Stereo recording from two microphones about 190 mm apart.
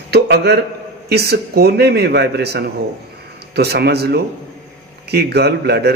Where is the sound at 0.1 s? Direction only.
60° right (ahead or behind).